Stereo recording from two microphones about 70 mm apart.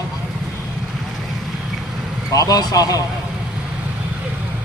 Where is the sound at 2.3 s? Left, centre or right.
Left.